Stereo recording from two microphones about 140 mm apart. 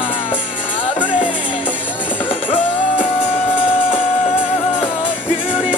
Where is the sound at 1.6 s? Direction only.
10° left (ahead or behind).